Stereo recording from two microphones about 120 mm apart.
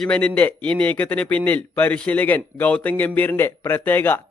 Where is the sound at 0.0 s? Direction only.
10° left (ahead or behind).